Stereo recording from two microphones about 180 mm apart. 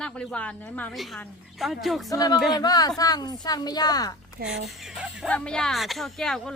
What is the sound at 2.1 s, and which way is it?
Speech, 20° left (ahead or behind).